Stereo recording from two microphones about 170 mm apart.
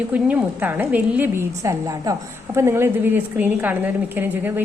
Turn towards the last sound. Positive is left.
turn(degrees=-10)  # may be behind; listen again after turning